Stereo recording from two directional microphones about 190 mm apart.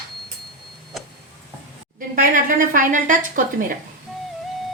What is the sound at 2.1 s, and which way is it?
A woman's voice, 45° right (ahead or behind).